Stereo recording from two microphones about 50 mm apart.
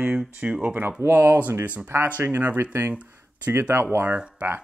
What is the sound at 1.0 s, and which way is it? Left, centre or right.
A man's voice, right.